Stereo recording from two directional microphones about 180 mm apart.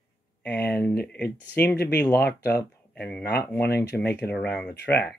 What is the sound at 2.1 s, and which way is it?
Speech, 60° left (ahead or behind).